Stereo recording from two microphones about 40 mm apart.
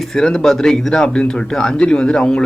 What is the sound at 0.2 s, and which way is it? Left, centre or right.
A man's voice, centre.